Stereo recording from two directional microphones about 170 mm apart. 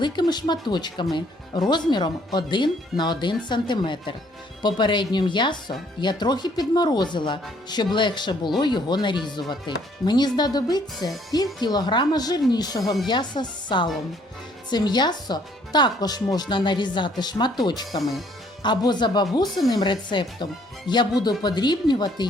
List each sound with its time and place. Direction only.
0.0 s speech: 25° left (ahead or behind)